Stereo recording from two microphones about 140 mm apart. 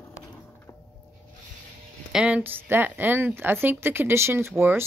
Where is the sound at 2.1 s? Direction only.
10° right (ahead or behind).